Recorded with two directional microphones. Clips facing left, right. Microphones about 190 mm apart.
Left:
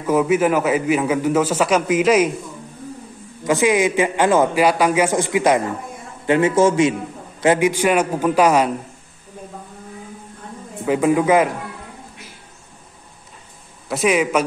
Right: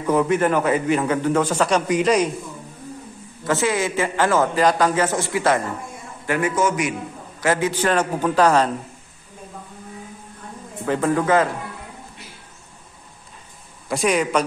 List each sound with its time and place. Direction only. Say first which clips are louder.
0.0 s a man's voice: left 2 dB; 5° left (ahead or behind)
3.4 s a man's voice: left 5 dB; 15° left (ahead or behind)
10.9 s a man's voice: left 3 dB; 10° left (ahead or behind)
13.8 s a man's voice: left 2 dB; 5° left (ahead or behind)